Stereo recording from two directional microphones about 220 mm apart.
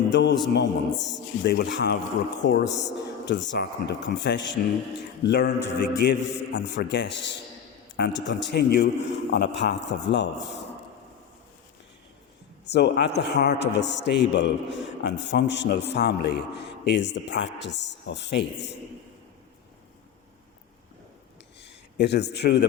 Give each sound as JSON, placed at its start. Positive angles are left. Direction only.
{"t": 0.1, "sound": "a man's voice", "side_deg": 50}
{"t": 12.6, "sound": "a man's voice", "side_deg": 50}
{"t": 21.6, "sound": "a man's voice", "side_deg": 50}